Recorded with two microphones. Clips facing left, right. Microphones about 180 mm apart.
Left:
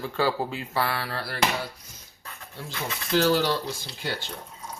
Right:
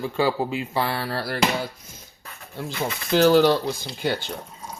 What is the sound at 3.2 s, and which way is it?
Speech, 55° right (ahead or behind).